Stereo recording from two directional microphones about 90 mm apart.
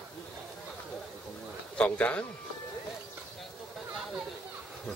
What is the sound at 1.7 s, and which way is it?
Speech, 15° left (ahead or behind).